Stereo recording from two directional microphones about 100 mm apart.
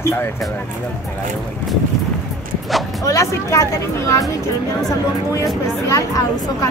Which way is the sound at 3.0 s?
30° left (ahead or behind).